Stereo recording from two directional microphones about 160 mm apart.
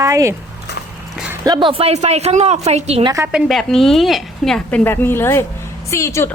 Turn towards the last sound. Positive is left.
turn(degrees=15)  # may be behind; listen again after turning